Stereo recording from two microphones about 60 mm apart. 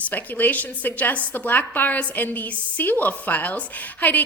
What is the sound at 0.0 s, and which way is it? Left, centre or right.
A woman's voice, left.